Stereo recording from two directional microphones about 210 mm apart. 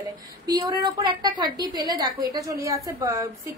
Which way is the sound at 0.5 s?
20° right (ahead or behind).